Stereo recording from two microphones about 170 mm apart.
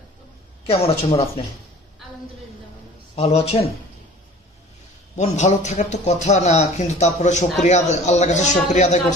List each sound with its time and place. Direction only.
0.7 s speech: 35° left (ahead or behind)
3.2 s speech: 35° left (ahead or behind)
5.1 s a man's voice: 45° left (ahead or behind)